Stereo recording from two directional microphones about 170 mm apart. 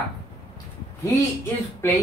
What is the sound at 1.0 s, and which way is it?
Speech, 15° left (ahead or behind).